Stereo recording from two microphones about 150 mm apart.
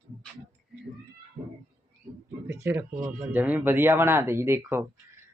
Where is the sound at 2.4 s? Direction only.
15° right (ahead or behind).